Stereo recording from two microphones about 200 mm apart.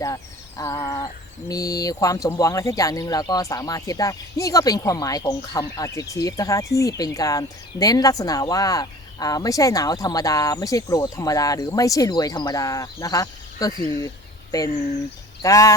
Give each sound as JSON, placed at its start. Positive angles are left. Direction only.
{"t": 0.0, "sound": "speech", "side_deg": 15}
{"t": 15.4, "sound": "speech", "side_deg": 15}